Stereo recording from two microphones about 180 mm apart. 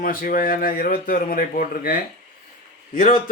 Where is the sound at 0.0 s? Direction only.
50° left (ahead or behind).